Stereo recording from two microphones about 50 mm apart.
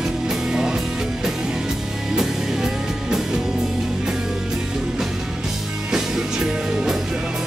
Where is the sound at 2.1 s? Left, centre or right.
Centre.